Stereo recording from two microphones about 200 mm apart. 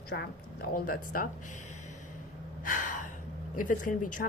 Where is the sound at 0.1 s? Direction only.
55° left (ahead or behind).